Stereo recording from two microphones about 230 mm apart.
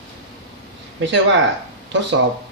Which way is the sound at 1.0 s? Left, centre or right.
Right.